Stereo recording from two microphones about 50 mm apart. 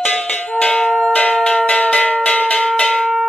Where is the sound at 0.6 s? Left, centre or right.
Left.